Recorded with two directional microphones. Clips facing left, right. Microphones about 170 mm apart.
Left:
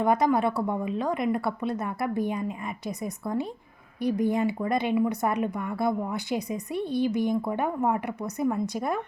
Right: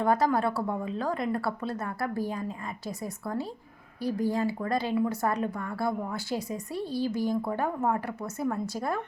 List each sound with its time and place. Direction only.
0.0 s speech: 20° left (ahead or behind)